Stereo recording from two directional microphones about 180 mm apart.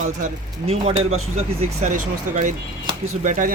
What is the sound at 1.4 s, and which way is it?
Speech, 40° right (ahead or behind).